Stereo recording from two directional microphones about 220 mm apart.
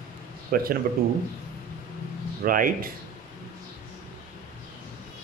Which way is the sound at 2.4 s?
40° right (ahead or behind).